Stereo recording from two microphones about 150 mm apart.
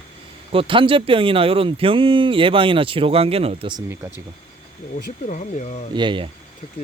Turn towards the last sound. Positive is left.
turn(degrees=-35)  # may be behind; listen again after turning